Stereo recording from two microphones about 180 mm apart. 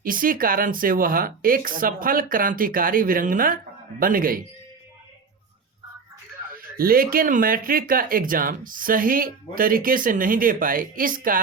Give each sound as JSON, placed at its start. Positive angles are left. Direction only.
{"t": 0.0, "sound": "speech", "side_deg": -50}
{"t": 6.7, "sound": "speech", "side_deg": -55}